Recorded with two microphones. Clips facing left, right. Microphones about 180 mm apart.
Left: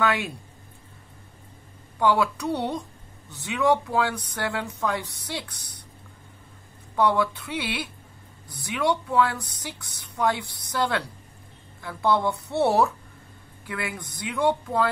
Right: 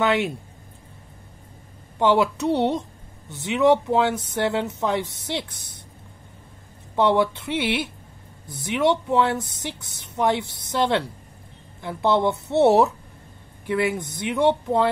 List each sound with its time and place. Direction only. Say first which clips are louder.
0.0 s speech: right 4 dB; 20° right (ahead or behind)
2.0 s speech: right 3 dB; 25° right (ahead or behind)
7.0 s speech: right 3 dB; 25° right (ahead or behind)